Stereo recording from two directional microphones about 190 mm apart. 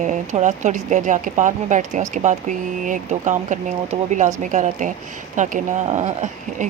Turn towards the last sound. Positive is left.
turn(degrees=-40)  # may be behind; listen again after turning